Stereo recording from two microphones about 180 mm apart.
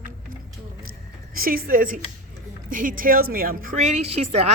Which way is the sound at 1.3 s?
55° right (ahead or behind).